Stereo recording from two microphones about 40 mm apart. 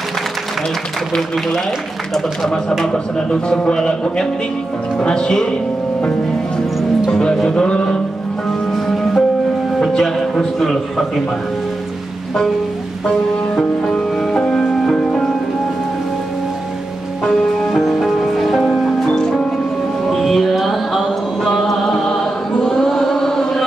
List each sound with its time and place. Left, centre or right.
2.8 s speech: left
7.1 s music: left
7.4 s speech: left
8.5 s music: centre
14.1 s music: centre
17.2 s music: centre
19.0 s music: centre
20.1 s music: centre
21.8 s choir: centre